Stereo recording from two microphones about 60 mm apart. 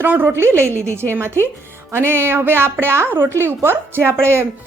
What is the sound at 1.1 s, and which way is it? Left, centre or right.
A woman's voice, right.